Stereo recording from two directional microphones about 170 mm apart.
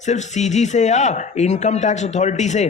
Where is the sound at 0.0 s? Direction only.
45° left (ahead or behind).